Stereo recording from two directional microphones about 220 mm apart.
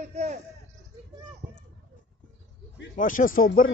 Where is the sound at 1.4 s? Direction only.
40° right (ahead or behind).